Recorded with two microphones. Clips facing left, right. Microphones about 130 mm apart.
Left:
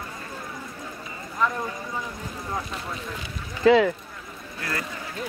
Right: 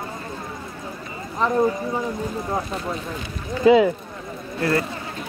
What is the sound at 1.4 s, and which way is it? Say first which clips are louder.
Speech: right 3 dB; 30° right (ahead or behind).